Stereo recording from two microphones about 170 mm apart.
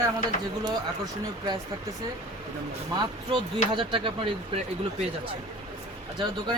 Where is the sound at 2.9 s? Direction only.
30° right (ahead or behind).